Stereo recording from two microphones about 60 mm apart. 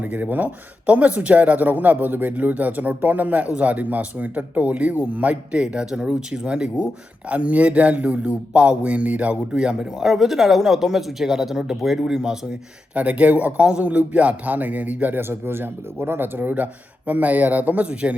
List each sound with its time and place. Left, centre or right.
0.0 s speech: right; by 12.5 s centre
12.9 s speech: right